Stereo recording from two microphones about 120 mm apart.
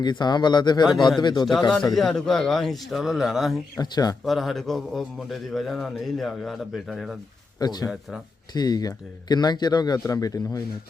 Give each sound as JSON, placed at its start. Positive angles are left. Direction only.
{"t": 0.0, "sound": "speech", "side_deg": 35}
{"t": 2.0, "sound": "a man's voice", "side_deg": 5}
{"t": 3.8, "sound": "speech", "side_deg": 35}
{"t": 4.3, "sound": "a man's voice", "side_deg": 0}
{"t": 7.6, "sound": "speech", "side_deg": 35}